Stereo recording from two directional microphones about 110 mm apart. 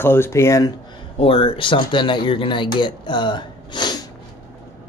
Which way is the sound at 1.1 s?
55° left (ahead or behind).